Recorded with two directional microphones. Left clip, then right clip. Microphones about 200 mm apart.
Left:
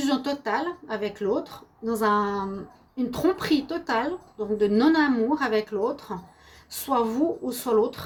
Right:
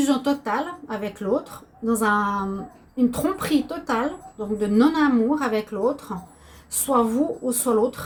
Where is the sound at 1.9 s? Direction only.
50° left (ahead or behind).